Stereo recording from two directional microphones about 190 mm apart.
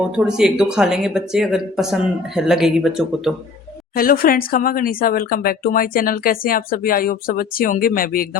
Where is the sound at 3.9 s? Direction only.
50° left (ahead or behind).